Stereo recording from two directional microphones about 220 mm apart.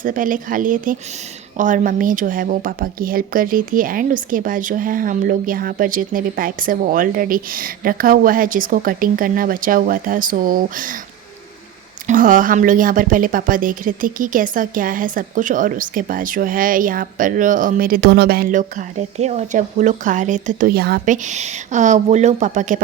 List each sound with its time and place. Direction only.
0.0 s speech: 35° right (ahead or behind)
12.0 s speech: 40° right (ahead or behind)